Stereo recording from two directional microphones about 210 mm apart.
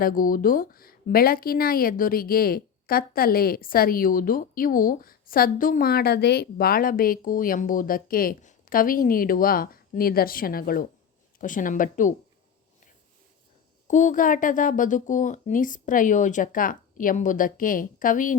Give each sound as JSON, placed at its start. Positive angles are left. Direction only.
{"t": 0.0, "sound": "speech", "side_deg": 40}
{"t": 13.8, "sound": "speech", "side_deg": 35}